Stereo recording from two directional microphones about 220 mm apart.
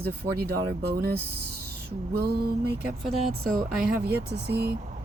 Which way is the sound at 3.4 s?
40° right (ahead or behind).